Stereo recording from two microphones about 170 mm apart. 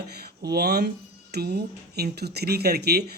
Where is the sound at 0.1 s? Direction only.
70° right (ahead or behind).